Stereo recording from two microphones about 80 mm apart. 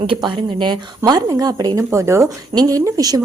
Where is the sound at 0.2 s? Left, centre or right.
Right.